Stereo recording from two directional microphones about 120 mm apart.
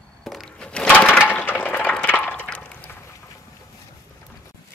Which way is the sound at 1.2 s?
15° left (ahead or behind).